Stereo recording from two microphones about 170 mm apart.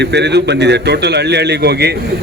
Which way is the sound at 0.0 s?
90° right.